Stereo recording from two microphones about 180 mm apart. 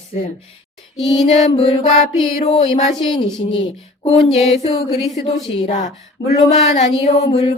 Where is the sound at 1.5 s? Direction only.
35° left (ahead or behind).